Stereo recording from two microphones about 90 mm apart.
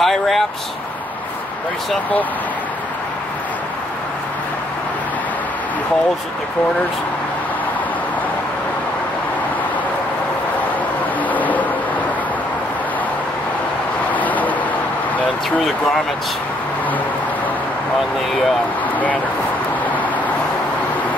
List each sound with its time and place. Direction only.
0.0 s a sound: 5° left (ahead or behind)
11.2 s vehicle: 20° left (ahead or behind)
14.1 s vehicle: 20° left (ahead or behind)